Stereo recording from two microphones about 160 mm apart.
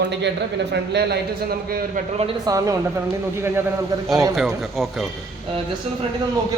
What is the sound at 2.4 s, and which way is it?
Speech, 20° right (ahead or behind).